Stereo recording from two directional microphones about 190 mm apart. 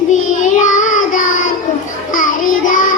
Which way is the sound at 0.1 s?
40° left (ahead or behind).